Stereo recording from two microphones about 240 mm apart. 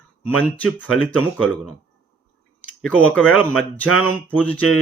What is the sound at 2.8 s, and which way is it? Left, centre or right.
Speech, centre.